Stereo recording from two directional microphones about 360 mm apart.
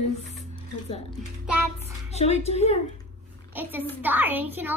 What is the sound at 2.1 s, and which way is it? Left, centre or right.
Speech, centre.